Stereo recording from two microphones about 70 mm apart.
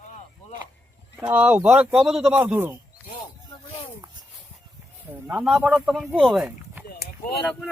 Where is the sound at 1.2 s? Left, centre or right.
Centre.